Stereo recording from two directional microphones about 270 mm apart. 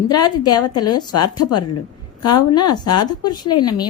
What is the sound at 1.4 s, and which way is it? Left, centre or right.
Speech, left.